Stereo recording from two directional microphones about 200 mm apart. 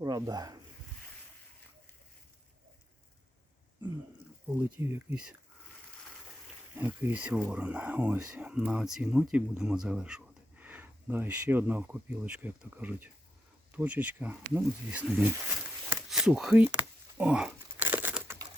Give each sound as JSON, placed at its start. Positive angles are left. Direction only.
{"t": 0.0, "sound": "speech", "side_deg": -20}
{"t": 4.4, "sound": "speech", "side_deg": -10}
{"t": 6.7, "sound": "speech", "side_deg": -10}
{"t": 16.0, "sound": "crumpling", "side_deg": 0}